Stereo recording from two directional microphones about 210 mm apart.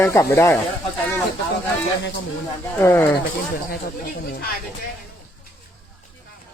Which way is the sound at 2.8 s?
10° left (ahead or behind).